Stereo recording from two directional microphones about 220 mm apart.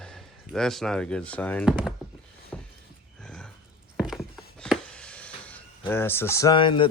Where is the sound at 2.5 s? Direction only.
5° left (ahead or behind).